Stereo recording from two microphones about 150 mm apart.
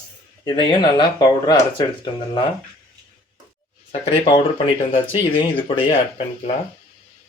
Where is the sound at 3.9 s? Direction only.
40° left (ahead or behind).